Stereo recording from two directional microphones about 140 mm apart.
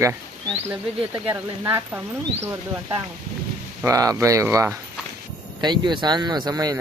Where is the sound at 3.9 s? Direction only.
25° right (ahead or behind).